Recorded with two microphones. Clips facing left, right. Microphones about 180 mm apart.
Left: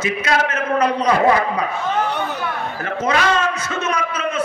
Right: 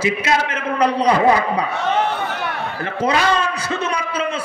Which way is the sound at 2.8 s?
30° right (ahead or behind).